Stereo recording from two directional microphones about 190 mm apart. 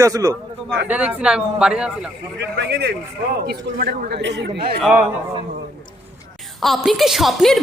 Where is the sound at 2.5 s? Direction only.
65° right (ahead or behind).